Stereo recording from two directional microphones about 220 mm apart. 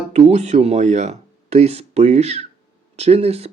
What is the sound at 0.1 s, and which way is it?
Speech, 30° right (ahead or behind).